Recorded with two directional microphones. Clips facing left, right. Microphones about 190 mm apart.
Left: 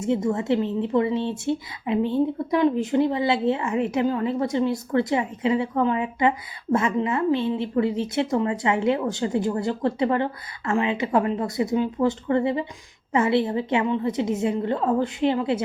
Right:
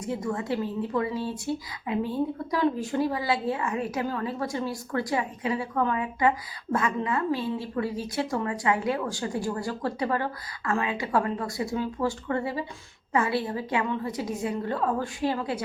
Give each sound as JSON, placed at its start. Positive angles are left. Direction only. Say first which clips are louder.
{"t": 0.0, "sound": "speech", "louder": "left 7 dB", "side_deg": 25}